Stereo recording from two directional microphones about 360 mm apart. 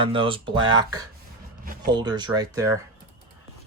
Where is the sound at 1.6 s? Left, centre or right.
Right.